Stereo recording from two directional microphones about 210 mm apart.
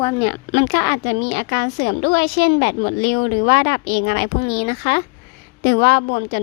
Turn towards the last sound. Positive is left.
turn(degrees=55)  # may be behind; listen again after turning